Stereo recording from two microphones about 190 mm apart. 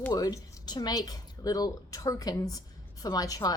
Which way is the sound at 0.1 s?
20° left (ahead or behind).